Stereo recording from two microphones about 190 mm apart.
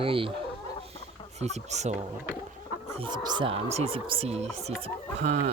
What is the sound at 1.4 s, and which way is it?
Speech, 35° right (ahead or behind).